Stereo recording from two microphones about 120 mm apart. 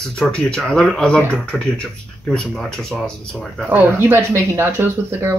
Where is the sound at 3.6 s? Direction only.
15° right (ahead or behind).